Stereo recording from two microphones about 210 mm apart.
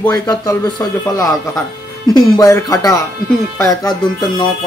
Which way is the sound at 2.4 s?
15° left (ahead or behind).